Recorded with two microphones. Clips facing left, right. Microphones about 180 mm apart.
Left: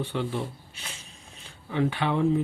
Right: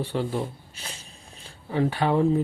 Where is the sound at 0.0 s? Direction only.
40° right (ahead or behind).